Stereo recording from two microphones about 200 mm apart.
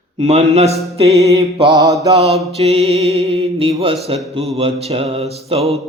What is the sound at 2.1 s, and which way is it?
Music, 30° right (ahead or behind).